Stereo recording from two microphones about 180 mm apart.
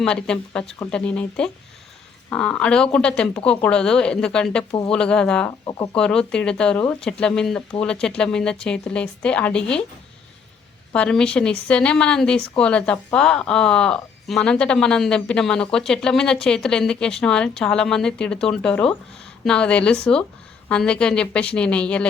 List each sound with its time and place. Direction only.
0.0 s speech: 5° left (ahead or behind)
5.5 s speech: 20° left (ahead or behind)
5.9 s speech: 5° left (ahead or behind)
10.9 s speech: 5° left (ahead or behind)